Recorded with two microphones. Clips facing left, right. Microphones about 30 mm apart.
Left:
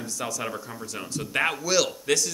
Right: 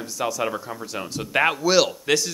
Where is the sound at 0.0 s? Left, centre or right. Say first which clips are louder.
Right 6 dB; centre.